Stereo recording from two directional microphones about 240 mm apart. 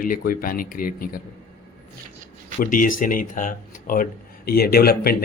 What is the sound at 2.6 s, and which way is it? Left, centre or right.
Speech, left.